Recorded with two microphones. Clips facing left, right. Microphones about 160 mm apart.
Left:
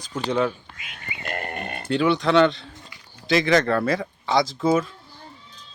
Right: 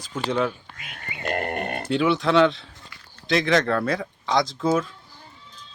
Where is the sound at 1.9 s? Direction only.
Centre (ahead or behind).